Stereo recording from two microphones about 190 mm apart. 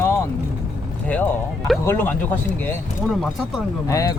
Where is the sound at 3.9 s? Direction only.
20° left (ahead or behind).